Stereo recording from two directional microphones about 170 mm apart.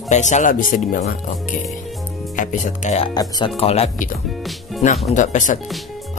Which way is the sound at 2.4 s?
50° left (ahead or behind).